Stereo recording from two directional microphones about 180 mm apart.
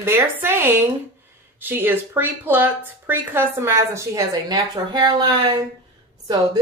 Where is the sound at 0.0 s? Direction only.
10° right (ahead or behind).